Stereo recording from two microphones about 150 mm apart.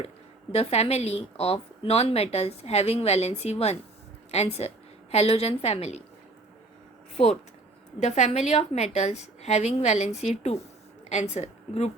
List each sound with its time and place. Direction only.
0.5 s a woman's voice: 45° left (ahead or behind)
7.9 s a woman's voice: 50° left (ahead or behind)